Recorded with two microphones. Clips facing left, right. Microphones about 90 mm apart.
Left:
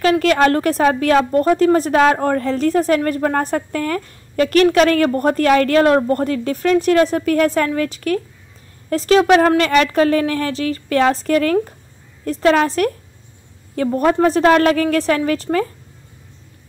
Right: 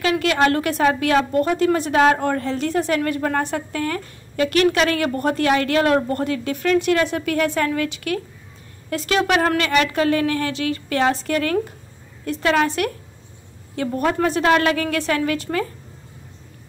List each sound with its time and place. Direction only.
0.0 s a woman's voice: 40° left (ahead or behind)